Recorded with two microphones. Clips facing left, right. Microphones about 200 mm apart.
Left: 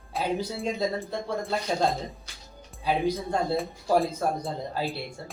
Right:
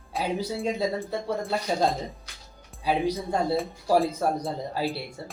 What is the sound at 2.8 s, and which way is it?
Speech, 5° right (ahead or behind).